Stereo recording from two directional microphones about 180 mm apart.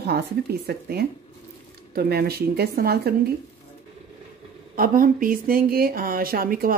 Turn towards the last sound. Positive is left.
turn(degrees=-55)  # may be behind; listen again after turning